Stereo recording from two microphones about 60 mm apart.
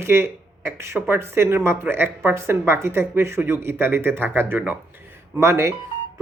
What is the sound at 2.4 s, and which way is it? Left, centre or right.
Speech, right.